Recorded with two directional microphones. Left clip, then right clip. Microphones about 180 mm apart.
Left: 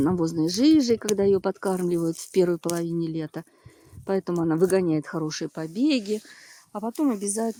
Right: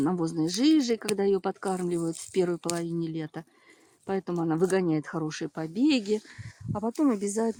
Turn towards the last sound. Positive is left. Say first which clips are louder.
# left 1 dB
turn(degrees=10)  # may be behind; listen again after turning